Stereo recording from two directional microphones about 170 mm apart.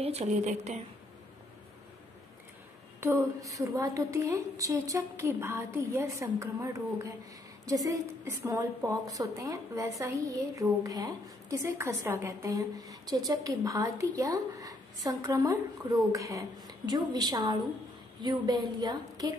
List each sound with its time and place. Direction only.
0.0 s speech: 40° right (ahead or behind)
3.0 s a woman's voice: 15° right (ahead or behind)